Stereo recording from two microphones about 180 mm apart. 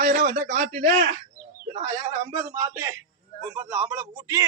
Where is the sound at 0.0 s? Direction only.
45° right (ahead or behind).